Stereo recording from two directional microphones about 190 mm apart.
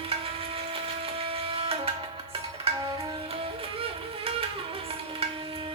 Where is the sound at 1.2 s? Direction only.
30° right (ahead or behind).